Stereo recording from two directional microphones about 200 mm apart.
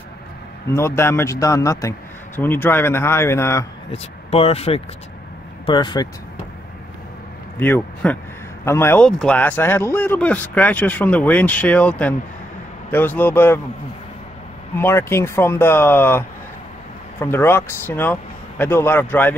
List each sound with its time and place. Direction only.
0.7 s speech: 15° left (ahead or behind)
3.9 s speech: 30° left (ahead or behind)
7.5 s speech: 10° left (ahead or behind)
14.8 s speech: 10° left (ahead or behind)